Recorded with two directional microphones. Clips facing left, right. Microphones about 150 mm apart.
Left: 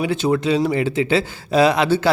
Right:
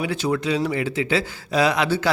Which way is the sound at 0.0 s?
25° left (ahead or behind).